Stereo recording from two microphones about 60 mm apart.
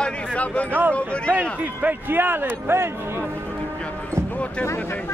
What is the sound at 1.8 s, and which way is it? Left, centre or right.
Speech, right.